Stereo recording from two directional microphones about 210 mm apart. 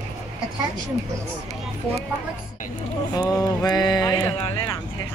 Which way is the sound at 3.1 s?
20° left (ahead or behind).